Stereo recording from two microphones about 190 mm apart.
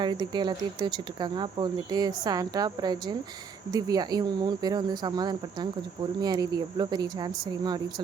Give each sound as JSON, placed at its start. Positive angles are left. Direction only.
{"t": 0.0, "sound": "speech", "side_deg": -25}